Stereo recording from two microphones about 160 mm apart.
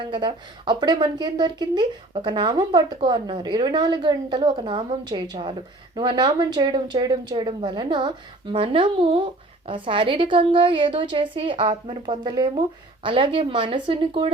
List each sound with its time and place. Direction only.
0.0 s a woman's voice: 30° right (ahead or behind)